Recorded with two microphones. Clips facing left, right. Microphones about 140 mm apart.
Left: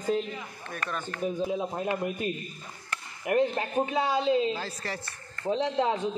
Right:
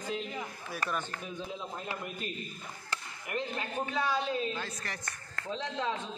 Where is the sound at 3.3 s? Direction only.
50° left (ahead or behind).